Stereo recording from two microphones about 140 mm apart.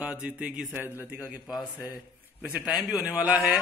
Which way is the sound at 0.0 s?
10° right (ahead or behind).